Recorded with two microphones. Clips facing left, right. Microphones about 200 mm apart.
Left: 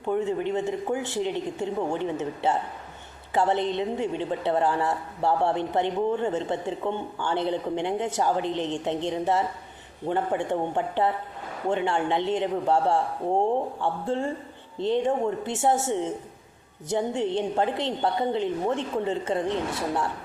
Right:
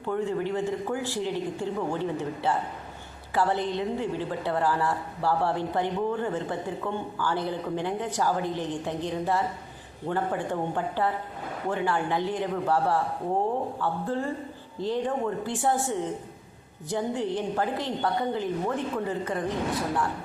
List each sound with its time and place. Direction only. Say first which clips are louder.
0.0 s a woman's voice: left 2 dB; 20° left (ahead or behind)